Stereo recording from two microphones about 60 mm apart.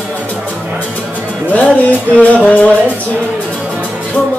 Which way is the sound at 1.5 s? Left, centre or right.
Left.